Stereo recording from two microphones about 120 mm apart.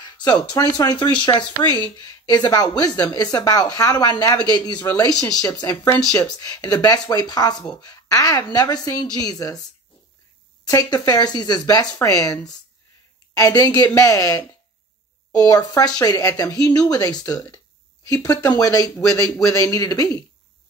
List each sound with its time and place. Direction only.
0.0 s music: 35° left (ahead or behind)
0.7 s speech: 35° left (ahead or behind)
6.2 s speech: 35° left (ahead or behind)
10.7 s speech: 35° left (ahead or behind)